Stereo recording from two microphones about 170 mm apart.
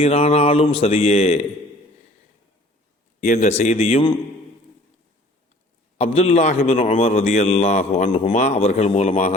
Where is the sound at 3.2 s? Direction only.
45° left (ahead or behind).